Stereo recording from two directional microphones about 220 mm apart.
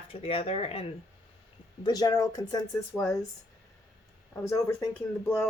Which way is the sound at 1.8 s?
15° left (ahead or behind).